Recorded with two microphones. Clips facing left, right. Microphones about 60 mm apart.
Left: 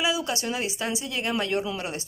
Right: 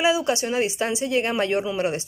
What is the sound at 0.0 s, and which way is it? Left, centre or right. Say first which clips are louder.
A woman's voice: right 6 dB; right.